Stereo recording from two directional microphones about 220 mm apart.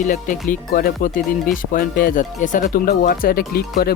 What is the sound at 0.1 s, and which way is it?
Speech, 35° left (ahead or behind).